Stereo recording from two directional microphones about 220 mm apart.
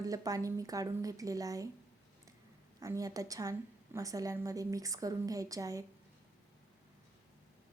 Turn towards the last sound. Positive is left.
turn(degrees=-15)  # may be behind; listen again after turning